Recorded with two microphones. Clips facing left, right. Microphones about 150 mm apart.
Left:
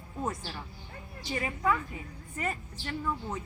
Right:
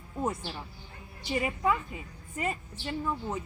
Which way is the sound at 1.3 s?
20° right (ahead or behind).